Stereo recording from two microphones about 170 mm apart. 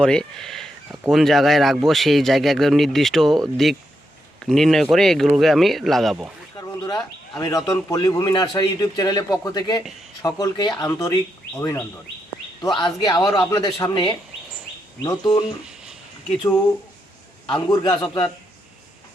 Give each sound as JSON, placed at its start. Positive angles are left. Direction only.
{"t": 0.0, "sound": "a man's voice", "side_deg": 5}
{"t": 6.8, "sound": "speech", "side_deg": 25}
{"t": 12.7, "sound": "speech", "side_deg": 25}
{"t": 17.4, "sound": "speech", "side_deg": 25}